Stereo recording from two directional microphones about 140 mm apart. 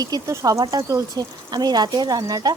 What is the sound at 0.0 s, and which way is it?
Speech, 25° right (ahead or behind).